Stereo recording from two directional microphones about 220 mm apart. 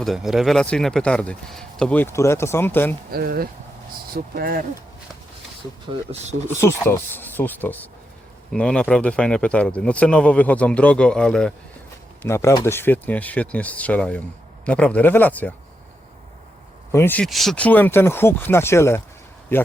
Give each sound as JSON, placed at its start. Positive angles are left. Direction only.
{"t": 0.0, "sound": "a man's voice", "side_deg": 0}
{"t": 3.1, "sound": "speech", "side_deg": -45}
{"t": 6.1, "sound": "speech", "side_deg": -30}
{"t": 6.6, "sound": "a man's voice", "side_deg": 10}
{"t": 16.9, "sound": "speech", "side_deg": 10}